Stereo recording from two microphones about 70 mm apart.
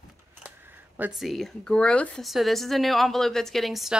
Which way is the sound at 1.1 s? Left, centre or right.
Centre.